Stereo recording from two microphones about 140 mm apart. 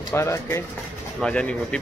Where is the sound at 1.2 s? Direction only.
10° left (ahead or behind).